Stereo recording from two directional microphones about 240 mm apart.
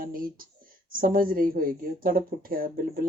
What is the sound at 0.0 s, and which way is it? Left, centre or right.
Speech, right.